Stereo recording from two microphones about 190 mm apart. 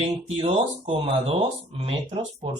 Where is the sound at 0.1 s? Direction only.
30° right (ahead or behind).